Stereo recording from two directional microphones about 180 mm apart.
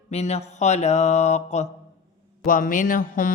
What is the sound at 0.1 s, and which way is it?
Mantra, 35° left (ahead or behind).